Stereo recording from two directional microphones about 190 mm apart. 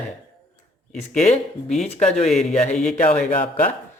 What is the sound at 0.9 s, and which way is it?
Speech, 35° left (ahead or behind).